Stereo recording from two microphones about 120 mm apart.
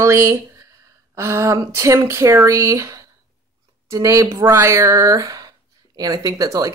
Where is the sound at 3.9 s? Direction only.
25° right (ahead or behind).